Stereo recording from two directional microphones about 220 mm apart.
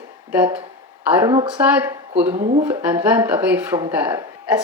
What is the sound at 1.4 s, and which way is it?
Speech, 5° right (ahead or behind).